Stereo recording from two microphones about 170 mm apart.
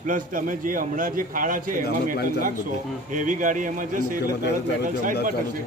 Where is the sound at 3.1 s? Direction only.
50° right (ahead or behind).